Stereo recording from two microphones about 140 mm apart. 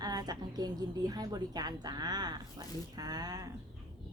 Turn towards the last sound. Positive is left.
turn(degrees=-25)  # may be behind; listen again after turning